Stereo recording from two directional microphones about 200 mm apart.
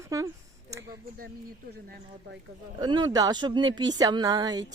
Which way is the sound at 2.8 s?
20° right (ahead or behind).